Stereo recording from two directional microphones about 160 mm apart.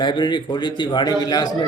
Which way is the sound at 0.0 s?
30° left (ahead or behind).